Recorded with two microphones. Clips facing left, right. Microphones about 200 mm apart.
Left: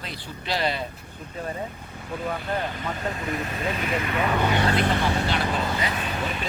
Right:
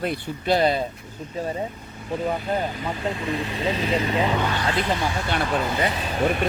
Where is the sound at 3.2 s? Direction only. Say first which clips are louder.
Right 3 dB; 25° right (ahead or behind).